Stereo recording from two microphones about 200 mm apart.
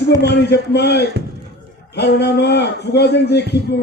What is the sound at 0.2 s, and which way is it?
A man's voice, 55° left (ahead or behind).